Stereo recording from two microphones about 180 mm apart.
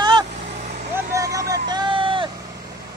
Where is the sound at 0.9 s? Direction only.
20° right (ahead or behind).